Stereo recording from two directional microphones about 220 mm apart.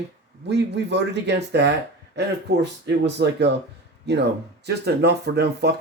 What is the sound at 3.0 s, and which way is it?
Speech, 50° right (ahead or behind).